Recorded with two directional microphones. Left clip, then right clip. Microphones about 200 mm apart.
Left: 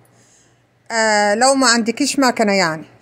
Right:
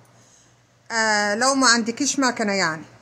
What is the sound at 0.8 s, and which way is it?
Speech, 15° left (ahead or behind).